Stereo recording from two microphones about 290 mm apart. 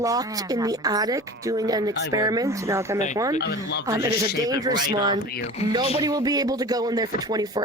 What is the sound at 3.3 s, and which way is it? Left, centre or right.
Speech, left.